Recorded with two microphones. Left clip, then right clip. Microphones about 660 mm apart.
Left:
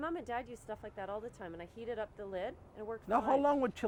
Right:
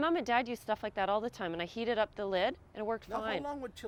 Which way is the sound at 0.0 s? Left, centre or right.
Right.